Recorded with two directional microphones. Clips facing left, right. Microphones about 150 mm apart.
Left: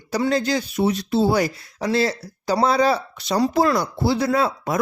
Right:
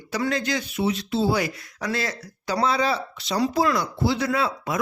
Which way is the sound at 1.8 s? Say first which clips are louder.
Left 7 dB; 30° left (ahead or behind).